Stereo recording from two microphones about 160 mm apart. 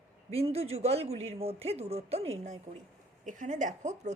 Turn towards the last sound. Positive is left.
turn(degrees=-45)  # may be behind; listen again after turning